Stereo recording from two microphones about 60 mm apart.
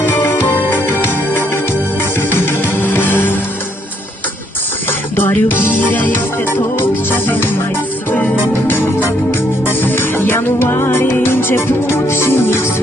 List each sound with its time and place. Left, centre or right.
0.0 s music: left
4.9 s music: left
8.6 s organ: left
9.6 s music: left